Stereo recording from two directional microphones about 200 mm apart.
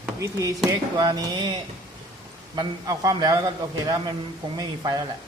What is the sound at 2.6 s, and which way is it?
A man's voice, 20° right (ahead or behind).